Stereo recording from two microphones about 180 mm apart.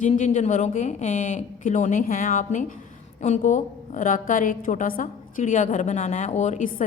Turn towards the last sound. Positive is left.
turn(degrees=40)  # may be behind; listen again after turning